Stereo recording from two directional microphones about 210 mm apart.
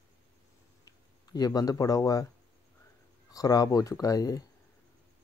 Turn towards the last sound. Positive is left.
turn(degrees=15)  # may be behind; listen again after turning